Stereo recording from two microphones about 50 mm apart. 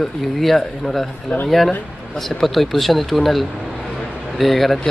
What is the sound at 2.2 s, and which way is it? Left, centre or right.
Speech, centre.